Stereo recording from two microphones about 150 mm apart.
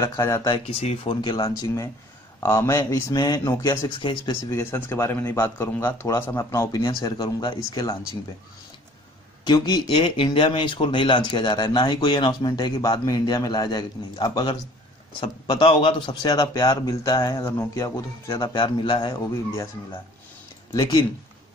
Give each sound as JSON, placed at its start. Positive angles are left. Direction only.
{"t": 0.0, "sound": "speech", "side_deg": 15}
{"t": 0.7, "sound": "speech", "side_deg": 40}
{"t": 9.5, "sound": "speech", "side_deg": 30}
{"t": 19.1, "sound": "speech", "side_deg": 20}
{"t": 20.7, "sound": "speech", "side_deg": 25}